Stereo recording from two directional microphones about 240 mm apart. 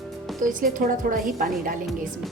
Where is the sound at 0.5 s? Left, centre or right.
Right.